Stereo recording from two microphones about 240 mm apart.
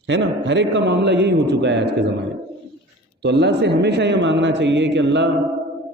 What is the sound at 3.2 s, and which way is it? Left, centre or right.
A man's voice, right.